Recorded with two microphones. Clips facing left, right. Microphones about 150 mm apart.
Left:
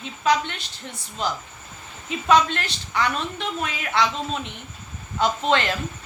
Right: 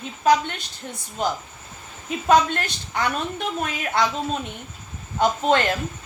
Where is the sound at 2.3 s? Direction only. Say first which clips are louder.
Right 1 dB; 45° right (ahead or behind).